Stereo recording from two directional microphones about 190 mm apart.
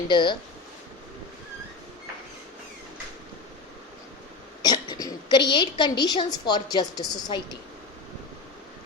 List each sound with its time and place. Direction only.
0.1 s a woman's voice: 25° left (ahead or behind)
4.6 s a woman's voice: 20° left (ahead or behind)